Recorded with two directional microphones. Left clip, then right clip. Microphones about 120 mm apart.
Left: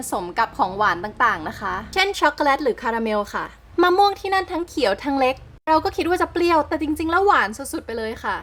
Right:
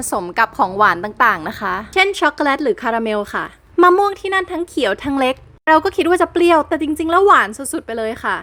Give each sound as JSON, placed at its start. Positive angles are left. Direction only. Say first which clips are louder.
{"t": 0.3, "sound": "a woman's voice", "louder": "right 6 dB", "side_deg": -35}